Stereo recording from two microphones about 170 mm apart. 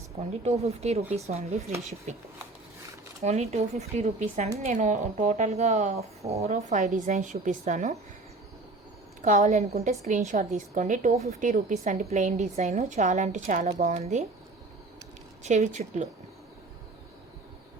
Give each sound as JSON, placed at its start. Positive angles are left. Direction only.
{"t": 0.6, "sound": "a woman's voice", "side_deg": -40}
{"t": 3.2, "sound": "a woman's voice", "side_deg": -40}
{"t": 9.2, "sound": "a woman's voice", "side_deg": -45}
{"t": 15.4, "sound": "a woman's voice", "side_deg": -45}